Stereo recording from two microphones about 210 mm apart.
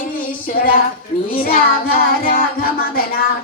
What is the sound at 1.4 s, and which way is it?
Child singing, 45° left (ahead or behind).